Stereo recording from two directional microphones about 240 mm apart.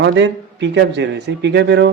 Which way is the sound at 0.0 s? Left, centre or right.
Right.